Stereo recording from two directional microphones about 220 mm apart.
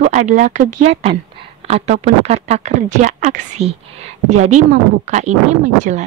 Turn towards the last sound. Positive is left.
turn(degrees=-35)  # may be behind; listen again after turning